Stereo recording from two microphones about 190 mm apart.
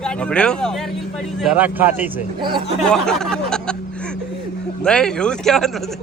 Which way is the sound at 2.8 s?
5° left (ahead or behind).